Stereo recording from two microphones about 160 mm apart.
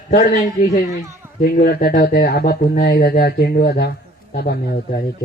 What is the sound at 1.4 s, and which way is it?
Speech, 65° left (ahead or behind).